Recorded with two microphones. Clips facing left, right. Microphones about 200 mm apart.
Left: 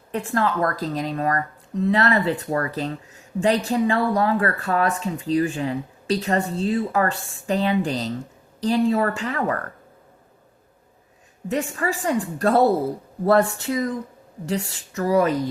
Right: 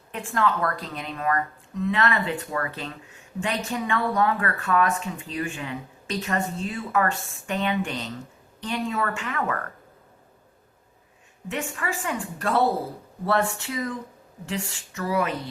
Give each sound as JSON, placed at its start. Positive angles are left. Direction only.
{"t": 0.1, "sound": "a woman's voice", "side_deg": 40}
{"t": 11.4, "sound": "a woman's voice", "side_deg": 40}